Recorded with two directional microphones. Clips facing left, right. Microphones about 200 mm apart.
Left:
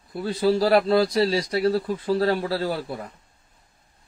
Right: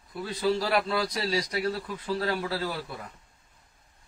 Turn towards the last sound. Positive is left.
turn(degrees=35)  # may be behind; listen again after turning